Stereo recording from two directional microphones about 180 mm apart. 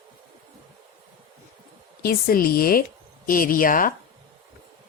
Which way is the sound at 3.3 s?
50° left (ahead or behind).